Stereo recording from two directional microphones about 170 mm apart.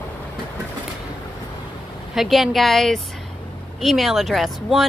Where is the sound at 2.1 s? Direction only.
Centre (ahead or behind).